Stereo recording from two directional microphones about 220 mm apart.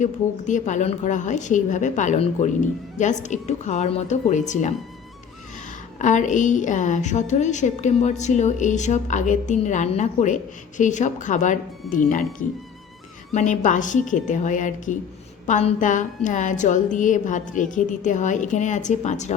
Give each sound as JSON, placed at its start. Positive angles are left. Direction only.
{"t": 0.0, "sound": "a woman's voice", "side_deg": 35}
{"t": 6.0, "sound": "a woman's voice", "side_deg": 35}